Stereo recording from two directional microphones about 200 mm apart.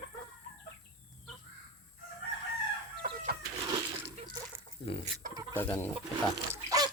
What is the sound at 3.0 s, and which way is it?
Chicken, 50° right (ahead or behind).